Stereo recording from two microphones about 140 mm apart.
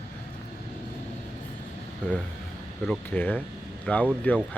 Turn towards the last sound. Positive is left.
turn(degrees=10)  # may be behind; listen again after turning